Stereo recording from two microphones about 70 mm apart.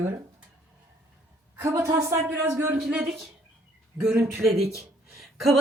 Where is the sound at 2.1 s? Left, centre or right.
Right.